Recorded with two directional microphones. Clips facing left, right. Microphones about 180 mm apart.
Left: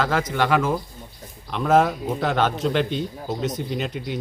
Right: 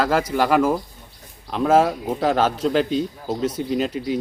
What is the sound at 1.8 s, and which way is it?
Speech, 35° right (ahead or behind).